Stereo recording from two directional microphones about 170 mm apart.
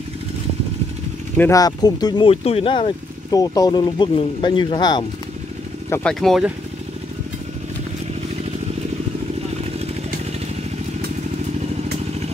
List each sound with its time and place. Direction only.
1.4 s speech: 20° left (ahead or behind)
5.9 s speech: 5° left (ahead or behind)